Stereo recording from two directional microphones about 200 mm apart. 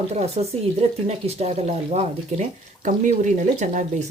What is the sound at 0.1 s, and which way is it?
Speech, 35° right (ahead or behind).